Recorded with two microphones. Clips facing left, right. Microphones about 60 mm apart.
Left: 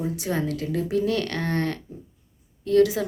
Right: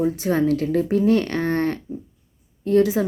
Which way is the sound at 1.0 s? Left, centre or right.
Right.